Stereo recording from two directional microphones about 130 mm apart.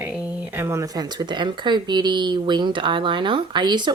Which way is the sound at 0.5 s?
20° right (ahead or behind).